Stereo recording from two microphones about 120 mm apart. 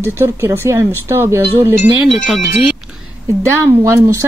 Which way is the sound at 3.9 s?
25° right (ahead or behind).